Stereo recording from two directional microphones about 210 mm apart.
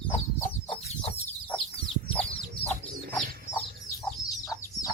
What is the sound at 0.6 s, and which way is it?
Chicken, 30° left (ahead or behind).